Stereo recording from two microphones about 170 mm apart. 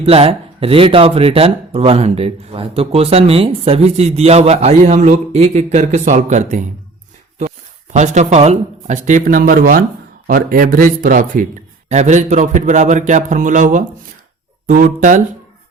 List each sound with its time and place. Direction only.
0.0 s speech: 35° right (ahead or behind)
7.9 s a man's voice: 45° right (ahead or behind)
11.9 s a man's voice: 40° right (ahead or behind)